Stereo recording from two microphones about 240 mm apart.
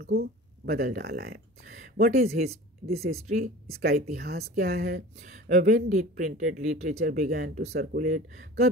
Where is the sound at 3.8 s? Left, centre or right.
Right.